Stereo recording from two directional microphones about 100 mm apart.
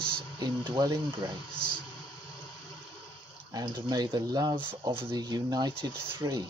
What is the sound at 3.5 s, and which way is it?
Speech, 40° right (ahead or behind).